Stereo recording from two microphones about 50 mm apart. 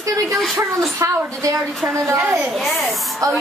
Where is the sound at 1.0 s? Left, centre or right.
Right.